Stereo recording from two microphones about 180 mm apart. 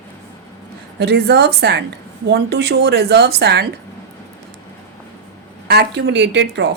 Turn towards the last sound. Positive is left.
turn(degrees=-70)  # may be behind; listen again after turning